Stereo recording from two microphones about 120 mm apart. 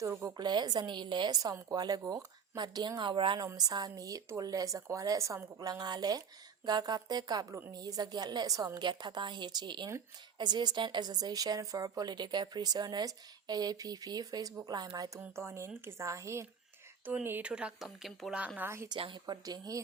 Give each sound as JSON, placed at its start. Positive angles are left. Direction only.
{"t": 0.0, "sound": "speech", "side_deg": -25}
{"t": 0.3, "sound": "a woman's voice", "side_deg": -35}
{"t": 15.2, "sound": "a woman's voice", "side_deg": -20}
{"t": 18.9, "sound": "a woman's voice", "side_deg": -45}
{"t": 19.2, "sound": "a woman's voice", "side_deg": -35}